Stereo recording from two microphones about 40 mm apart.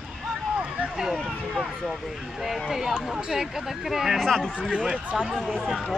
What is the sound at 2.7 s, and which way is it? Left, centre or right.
Speech, centre.